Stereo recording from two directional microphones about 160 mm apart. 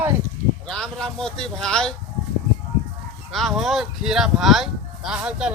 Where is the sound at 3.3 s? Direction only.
Centre (ahead or behind).